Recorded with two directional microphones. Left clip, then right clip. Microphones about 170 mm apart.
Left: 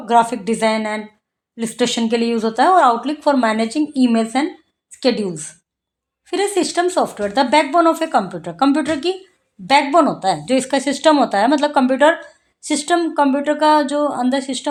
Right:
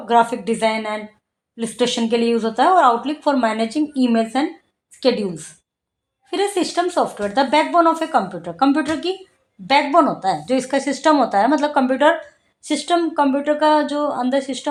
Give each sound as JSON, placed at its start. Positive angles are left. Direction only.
{"t": 0.0, "sound": "a woman's voice", "side_deg": 40}